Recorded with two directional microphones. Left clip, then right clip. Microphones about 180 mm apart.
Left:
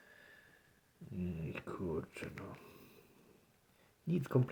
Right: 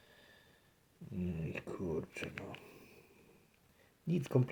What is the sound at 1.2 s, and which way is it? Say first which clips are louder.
Speech: right 2 dB; 10° right (ahead or behind).